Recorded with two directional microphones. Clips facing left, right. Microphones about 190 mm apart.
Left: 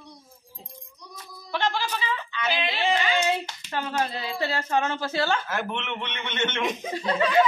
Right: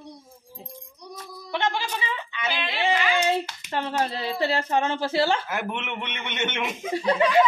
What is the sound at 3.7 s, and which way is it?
A woman's voice, 30° right (ahead or behind).